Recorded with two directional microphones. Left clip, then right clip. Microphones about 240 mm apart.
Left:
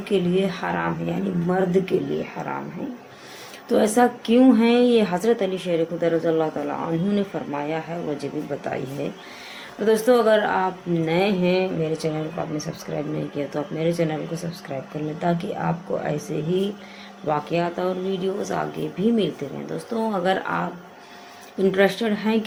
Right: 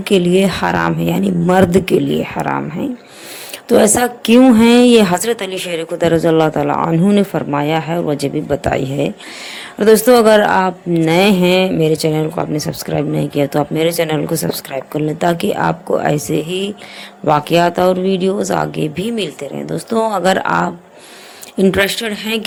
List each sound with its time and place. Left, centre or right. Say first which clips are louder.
0.0 s speech: right 9 dB; right
3.7 s a woman's voice: right 7 dB; right
15.2 s speech: right 10 dB; right
17.2 s a woman's voice: right 11 dB; right